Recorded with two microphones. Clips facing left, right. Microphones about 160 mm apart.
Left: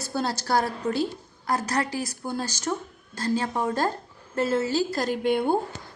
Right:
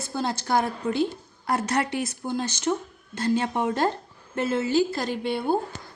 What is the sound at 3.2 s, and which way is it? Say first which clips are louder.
A woman's voice: right 2 dB; 35° left (ahead or behind).